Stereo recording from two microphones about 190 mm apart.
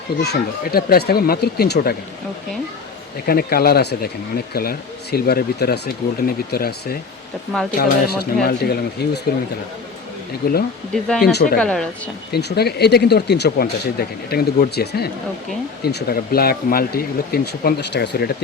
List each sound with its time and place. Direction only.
0.2 s speech: 55° left (ahead or behind)
3.2 s speech: 50° left (ahead or behind)
10.4 s speech: 55° left (ahead or behind)
10.9 s speech: 5° left (ahead or behind)
11.3 s speech: 60° left (ahead or behind)
11.5 s speech: 5° left (ahead or behind)
12.3 s speech: 60° left (ahead or behind)